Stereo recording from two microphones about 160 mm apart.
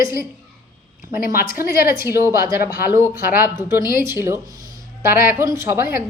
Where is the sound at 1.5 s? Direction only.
65° left (ahead or behind).